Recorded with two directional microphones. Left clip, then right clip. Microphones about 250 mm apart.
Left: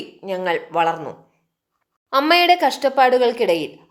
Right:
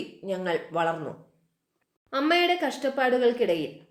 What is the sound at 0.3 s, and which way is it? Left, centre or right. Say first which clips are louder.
Speech: left 7 dB; centre.